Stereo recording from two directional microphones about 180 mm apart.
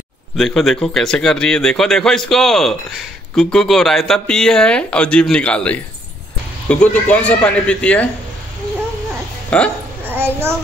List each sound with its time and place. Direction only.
0.4 s a man's voice: centre (ahead or behind)
9.5 s a man's voice: 10° left (ahead or behind)
10.0 s a sound: 10° right (ahead or behind)